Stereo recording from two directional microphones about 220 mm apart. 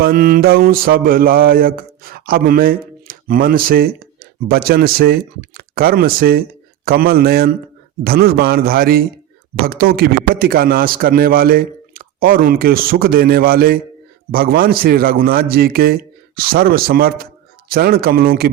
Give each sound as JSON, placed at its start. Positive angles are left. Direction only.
{"t": 0.0, "sound": "mantra", "side_deg": -45}
{"t": 6.8, "sound": "a man's voice", "side_deg": -45}